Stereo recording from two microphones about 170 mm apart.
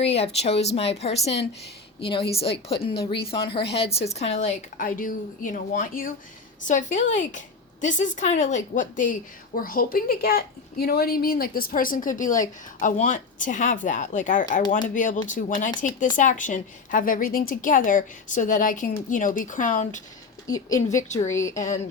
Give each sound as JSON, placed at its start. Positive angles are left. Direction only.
{"t": 0.2, "sound": "a woman's voice", "side_deg": 35}
{"t": 20.5, "sound": "speech", "side_deg": 20}
{"t": 20.9, "sound": "a woman's voice", "side_deg": 45}
{"t": 21.2, "sound": "a woman's voice", "side_deg": 15}